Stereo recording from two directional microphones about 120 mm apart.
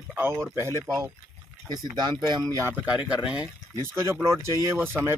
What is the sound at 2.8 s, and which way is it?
Speech, 10° right (ahead or behind).